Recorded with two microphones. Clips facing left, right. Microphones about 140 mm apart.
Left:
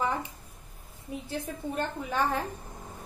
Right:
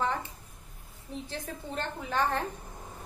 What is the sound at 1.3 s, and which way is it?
A woman's voice, 10° left (ahead or behind).